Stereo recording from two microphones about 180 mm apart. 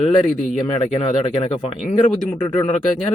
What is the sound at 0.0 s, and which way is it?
Speech, 40° left (ahead or behind).